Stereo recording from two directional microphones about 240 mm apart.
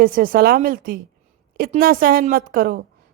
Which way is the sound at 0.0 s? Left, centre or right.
Right.